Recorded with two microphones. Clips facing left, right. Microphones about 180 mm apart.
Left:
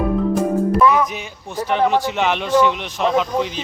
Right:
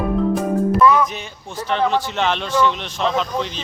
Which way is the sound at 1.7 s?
10° left (ahead or behind).